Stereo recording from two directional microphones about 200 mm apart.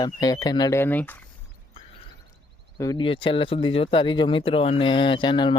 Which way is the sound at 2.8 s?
20° left (ahead or behind).